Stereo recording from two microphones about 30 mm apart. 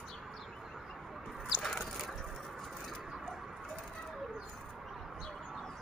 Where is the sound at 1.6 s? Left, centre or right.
Centre.